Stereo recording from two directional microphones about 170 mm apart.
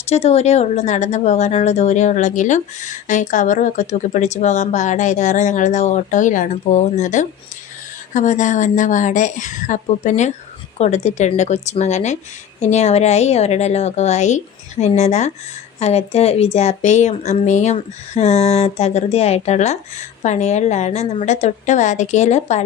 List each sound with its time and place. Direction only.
0.1 s a woman's voice: 40° left (ahead or behind)